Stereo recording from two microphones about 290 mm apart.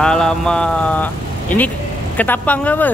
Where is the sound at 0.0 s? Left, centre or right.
Centre.